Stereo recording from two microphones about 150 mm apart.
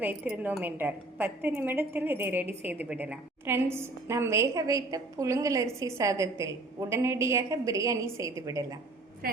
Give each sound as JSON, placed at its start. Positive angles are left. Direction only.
{"t": 0.0, "sound": "a woman's voice", "side_deg": -10}
{"t": 9.2, "sound": "speech", "side_deg": -90}